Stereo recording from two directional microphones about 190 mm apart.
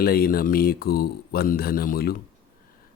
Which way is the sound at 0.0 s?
55° left (ahead or behind).